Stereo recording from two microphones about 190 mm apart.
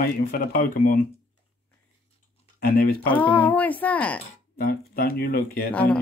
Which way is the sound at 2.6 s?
55° left (ahead or behind).